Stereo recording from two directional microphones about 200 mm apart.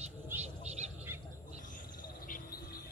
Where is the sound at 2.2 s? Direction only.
45° left (ahead or behind).